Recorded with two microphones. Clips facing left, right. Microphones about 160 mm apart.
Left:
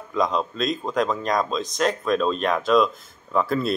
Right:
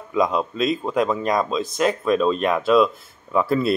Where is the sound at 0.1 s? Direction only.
5° right (ahead or behind).